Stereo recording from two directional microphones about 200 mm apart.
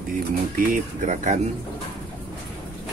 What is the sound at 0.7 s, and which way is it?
Speech, 40° right (ahead or behind).